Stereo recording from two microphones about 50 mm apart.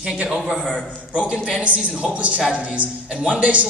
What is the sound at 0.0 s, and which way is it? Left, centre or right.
A man's voice, centre.